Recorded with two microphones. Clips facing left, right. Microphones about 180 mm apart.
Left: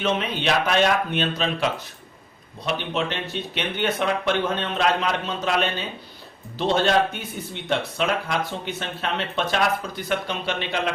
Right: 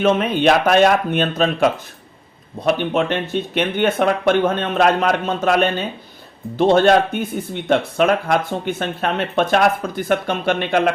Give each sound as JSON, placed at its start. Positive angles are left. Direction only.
{"t": 0.0, "sound": "speech", "side_deg": -50}